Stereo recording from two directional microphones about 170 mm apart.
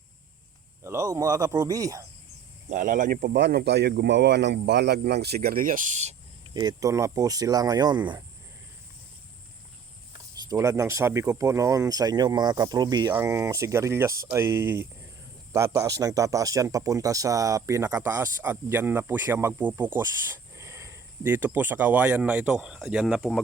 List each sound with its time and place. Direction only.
0.8 s speech: 15° right (ahead or behind)
2.6 s speech: 50° right (ahead or behind)
6.5 s speech: 25° right (ahead or behind)
10.5 s speech: 20° right (ahead or behind)